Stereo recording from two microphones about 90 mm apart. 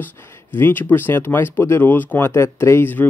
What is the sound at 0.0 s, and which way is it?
Speech, 20° left (ahead or behind).